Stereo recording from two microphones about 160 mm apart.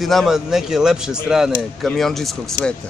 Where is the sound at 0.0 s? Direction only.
Centre (ahead or behind).